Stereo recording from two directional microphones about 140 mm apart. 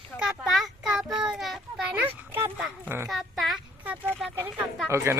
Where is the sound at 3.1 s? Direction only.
Centre (ahead or behind).